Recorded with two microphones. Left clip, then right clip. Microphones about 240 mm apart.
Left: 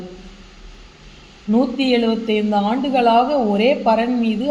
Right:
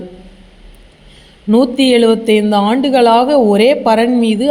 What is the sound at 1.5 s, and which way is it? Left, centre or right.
Speech, right.